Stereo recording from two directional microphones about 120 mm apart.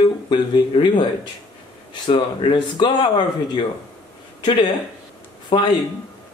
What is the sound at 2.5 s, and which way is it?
Speech, 40° left (ahead or behind).